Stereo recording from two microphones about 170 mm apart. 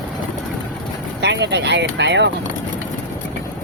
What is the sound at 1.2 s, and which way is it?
Speech, 90° right.